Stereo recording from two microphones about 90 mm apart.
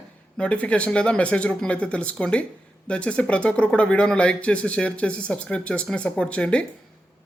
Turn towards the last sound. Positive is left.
turn(degrees=10)  # may be behind; listen again after turning